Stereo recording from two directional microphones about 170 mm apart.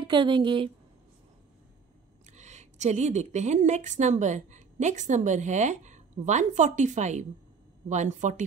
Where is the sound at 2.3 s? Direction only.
40° right (ahead or behind).